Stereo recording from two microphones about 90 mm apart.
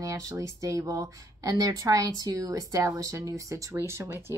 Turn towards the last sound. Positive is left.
turn(degrees=-30)  # may be behind; listen again after turning